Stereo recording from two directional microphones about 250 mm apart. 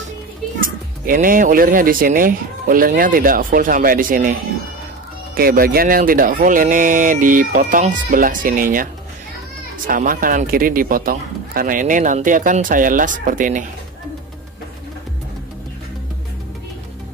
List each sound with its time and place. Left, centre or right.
0.6 s a man's voice: right
5.3 s a man's voice: right
9.8 s a man's voice: right